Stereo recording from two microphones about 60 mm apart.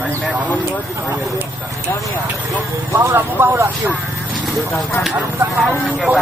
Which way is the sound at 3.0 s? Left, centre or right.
Right.